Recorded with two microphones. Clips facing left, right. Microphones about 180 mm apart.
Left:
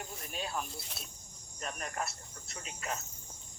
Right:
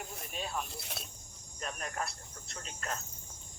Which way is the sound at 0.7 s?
65° right (ahead or behind).